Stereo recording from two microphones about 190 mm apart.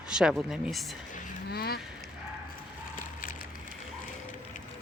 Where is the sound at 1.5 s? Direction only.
55° left (ahead or behind).